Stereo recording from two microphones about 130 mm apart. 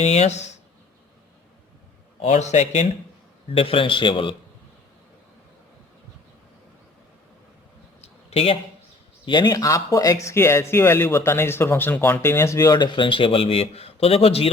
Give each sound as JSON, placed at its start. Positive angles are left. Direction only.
{"t": 0.0, "sound": "speech", "side_deg": 55}
{"t": 2.2, "sound": "speech", "side_deg": 60}
{"t": 3.5, "sound": "a man's voice", "side_deg": 45}
{"t": 8.0, "sound": "a sound", "side_deg": 50}
{"t": 9.2, "sound": "speech", "side_deg": 35}
{"t": 12.7, "sound": "a man's voice", "side_deg": 35}